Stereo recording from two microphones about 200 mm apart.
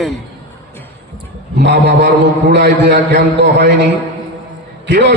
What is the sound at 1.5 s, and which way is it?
A man's voice, 60° right (ahead or behind).